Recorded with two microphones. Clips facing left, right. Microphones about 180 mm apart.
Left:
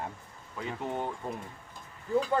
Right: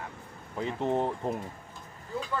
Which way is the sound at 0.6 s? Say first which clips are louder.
Right 6 dB; 30° right (ahead or behind).